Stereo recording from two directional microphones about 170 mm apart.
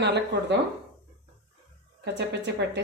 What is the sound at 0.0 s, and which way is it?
Speech, 85° right.